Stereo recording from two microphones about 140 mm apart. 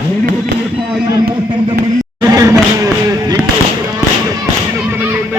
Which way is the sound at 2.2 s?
25° right (ahead or behind).